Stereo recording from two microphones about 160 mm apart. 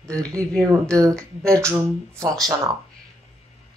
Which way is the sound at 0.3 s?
20° right (ahead or behind).